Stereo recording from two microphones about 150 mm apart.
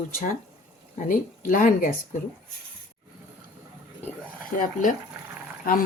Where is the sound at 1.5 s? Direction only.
60° left (ahead or behind).